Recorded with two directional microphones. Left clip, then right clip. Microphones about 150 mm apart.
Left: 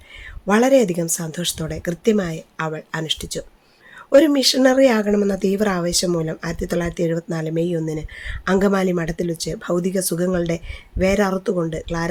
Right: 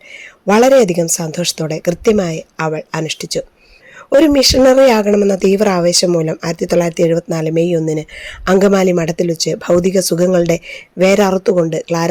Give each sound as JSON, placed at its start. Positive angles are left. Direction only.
{"t": 0.1, "sound": "speech", "side_deg": -35}